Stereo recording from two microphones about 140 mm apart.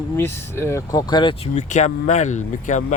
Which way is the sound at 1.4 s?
55° left (ahead or behind).